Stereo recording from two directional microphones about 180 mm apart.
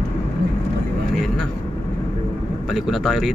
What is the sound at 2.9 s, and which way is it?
Speech, centre (ahead or behind).